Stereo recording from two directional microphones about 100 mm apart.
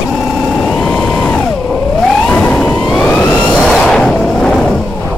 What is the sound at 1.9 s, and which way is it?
Vehicle, 5° left (ahead or behind).